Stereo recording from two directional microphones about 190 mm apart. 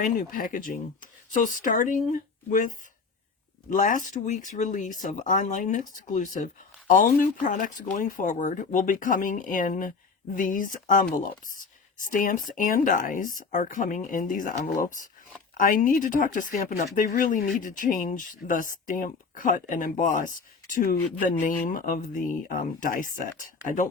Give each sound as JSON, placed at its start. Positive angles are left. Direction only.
{"t": 0.0, "sound": "speech", "side_deg": 45}